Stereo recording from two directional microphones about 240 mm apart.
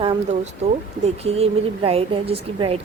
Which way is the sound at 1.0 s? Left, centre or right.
Right.